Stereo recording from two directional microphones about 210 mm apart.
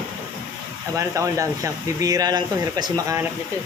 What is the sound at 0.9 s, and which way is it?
Speech, 15° right (ahead or behind).